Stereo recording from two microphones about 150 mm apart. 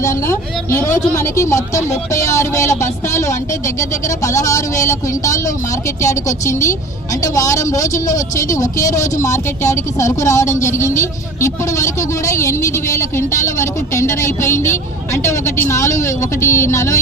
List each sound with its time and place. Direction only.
0.0 s a woman's voice: 20° left (ahead or behind)